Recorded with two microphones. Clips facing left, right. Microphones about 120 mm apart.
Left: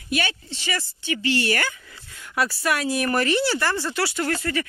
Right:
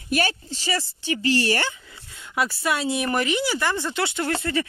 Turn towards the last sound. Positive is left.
turn(degrees=-25)  # may be behind; listen again after turning